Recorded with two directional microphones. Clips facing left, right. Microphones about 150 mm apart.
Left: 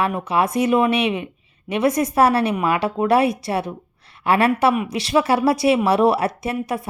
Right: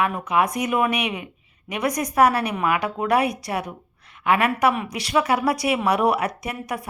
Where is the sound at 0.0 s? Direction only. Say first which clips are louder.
Left 1 dB; 30° left (ahead or behind).